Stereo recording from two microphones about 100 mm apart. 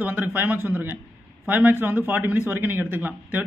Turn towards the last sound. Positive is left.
turn(degrees=-20)  # may be behind; listen again after turning